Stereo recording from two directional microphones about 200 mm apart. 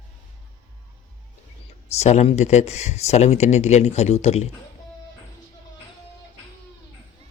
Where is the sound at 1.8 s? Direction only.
35° left (ahead or behind).